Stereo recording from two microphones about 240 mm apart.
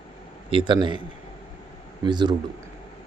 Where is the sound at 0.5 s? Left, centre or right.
Right.